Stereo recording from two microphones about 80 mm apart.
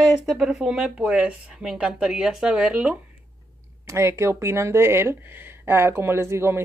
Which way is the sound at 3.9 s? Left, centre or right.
Right.